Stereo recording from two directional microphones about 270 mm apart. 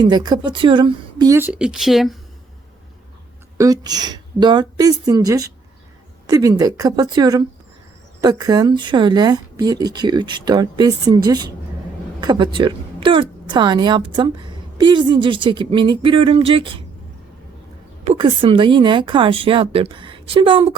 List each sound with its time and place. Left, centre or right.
0.0 s a woman's voice: centre
3.6 s a woman's voice: centre
18.0 s speech: right